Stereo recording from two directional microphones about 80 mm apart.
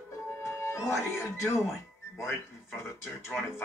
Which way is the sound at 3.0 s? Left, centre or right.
Left.